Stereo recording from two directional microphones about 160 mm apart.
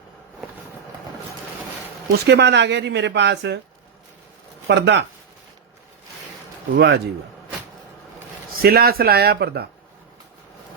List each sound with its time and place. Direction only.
2.2 s speech: 90° right
4.7 s speech: 90° right
6.7 s speech: 90° right
8.6 s speech: 70° right (ahead or behind); by 9.6 s 90° right